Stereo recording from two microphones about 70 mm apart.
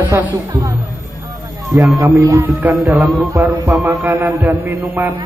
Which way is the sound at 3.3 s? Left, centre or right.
Right.